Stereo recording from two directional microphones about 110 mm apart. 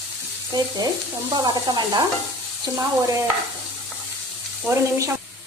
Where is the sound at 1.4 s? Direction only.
40° right (ahead or behind).